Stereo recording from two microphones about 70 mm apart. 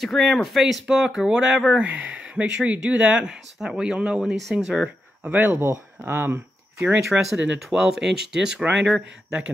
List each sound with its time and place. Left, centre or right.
0.0 s speech: centre
5.2 s speech: right
5.5 s speech: right
7.1 s speech: centre